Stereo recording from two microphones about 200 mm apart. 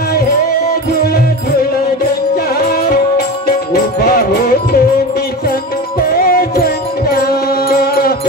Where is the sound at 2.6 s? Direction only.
50° left (ahead or behind).